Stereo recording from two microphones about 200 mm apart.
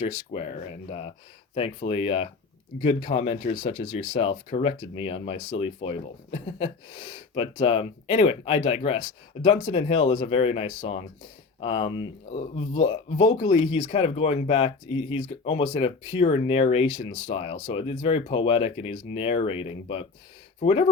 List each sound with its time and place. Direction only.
0.0 s speech: 30° left (ahead or behind)